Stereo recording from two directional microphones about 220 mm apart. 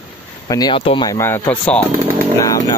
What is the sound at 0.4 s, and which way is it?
Speech, 20° left (ahead or behind).